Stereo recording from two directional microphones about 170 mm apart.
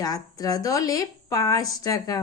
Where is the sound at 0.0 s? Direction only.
20° left (ahead or behind).